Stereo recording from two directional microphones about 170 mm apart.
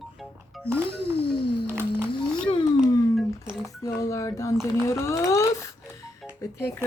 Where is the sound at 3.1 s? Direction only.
5° right (ahead or behind).